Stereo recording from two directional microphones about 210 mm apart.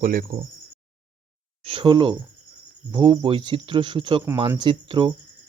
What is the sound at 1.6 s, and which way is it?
Speech, 25° right (ahead or behind).